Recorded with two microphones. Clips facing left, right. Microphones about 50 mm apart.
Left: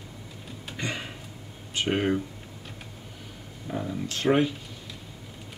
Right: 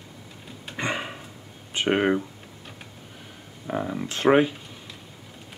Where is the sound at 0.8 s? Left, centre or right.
Right.